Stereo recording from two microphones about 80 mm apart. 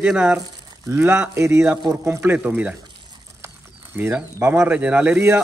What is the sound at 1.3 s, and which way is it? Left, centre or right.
Speech, right.